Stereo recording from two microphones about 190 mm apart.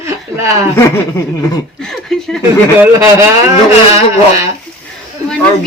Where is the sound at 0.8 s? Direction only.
15° left (ahead or behind).